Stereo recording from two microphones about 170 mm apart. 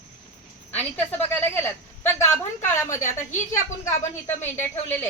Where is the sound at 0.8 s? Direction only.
10° left (ahead or behind).